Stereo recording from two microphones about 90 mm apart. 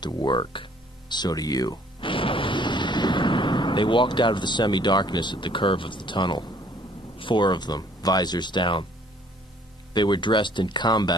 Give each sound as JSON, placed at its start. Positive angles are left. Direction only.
{"t": 0.0, "sound": "speech", "side_deg": 55}
{"t": 2.0, "sound": "speech", "side_deg": 70}
{"t": 9.9, "sound": "speech", "side_deg": 60}